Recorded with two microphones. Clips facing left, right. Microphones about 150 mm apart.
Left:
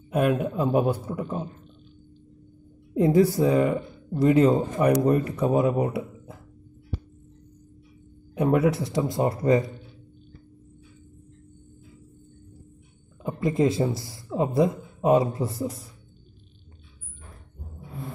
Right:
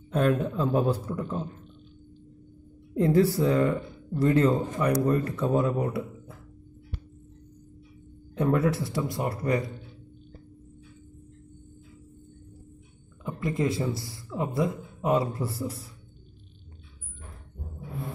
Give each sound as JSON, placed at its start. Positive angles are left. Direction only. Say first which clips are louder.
{"t": 0.1, "sound": "speech", "louder": "left 1 dB", "side_deg": 10}
{"t": 2.9, "sound": "speech", "louder": "left 3 dB", "side_deg": 15}
{"t": 8.4, "sound": "speech", "louder": "left 3 dB", "side_deg": 15}
{"t": 13.2, "sound": "speech", "louder": "left 5 dB", "side_deg": 25}